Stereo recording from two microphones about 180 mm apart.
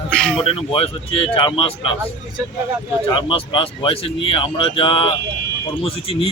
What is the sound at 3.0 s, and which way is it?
A man's voice, 30° left (ahead or behind).